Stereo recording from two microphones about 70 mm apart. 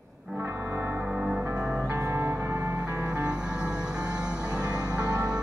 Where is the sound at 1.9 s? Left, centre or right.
Right.